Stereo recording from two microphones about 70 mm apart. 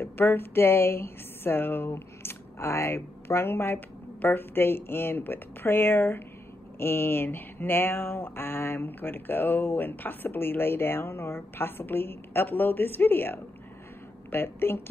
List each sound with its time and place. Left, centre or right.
0.0 s speech: left